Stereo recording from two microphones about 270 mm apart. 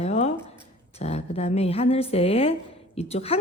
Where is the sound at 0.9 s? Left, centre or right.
Left.